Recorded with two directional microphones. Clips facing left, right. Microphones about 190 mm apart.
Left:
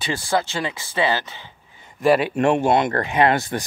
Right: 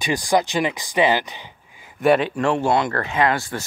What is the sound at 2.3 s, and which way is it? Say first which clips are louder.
Speech: left 2 dB; 20° left (ahead or behind).